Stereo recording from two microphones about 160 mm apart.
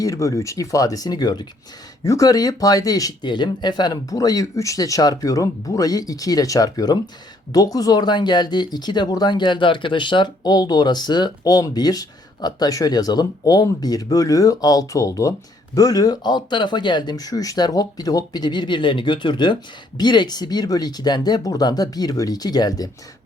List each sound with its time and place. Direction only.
0.0 s speech: 20° left (ahead or behind)